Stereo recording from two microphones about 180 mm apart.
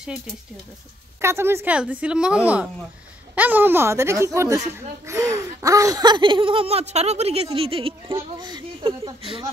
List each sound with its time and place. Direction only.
1.2 s a woman's voice: 15° right (ahead or behind)